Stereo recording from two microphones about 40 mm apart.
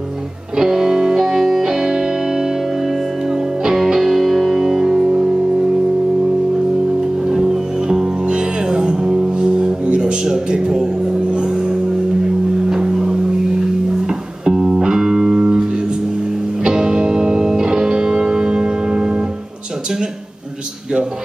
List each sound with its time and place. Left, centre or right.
0.6 s music: centre
7.2 s music: centre